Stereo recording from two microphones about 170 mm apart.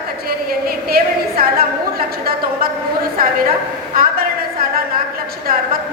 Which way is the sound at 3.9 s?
60° right (ahead or behind).